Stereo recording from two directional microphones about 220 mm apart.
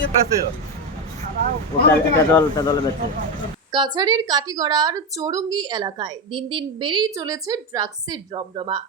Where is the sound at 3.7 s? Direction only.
20° right (ahead or behind).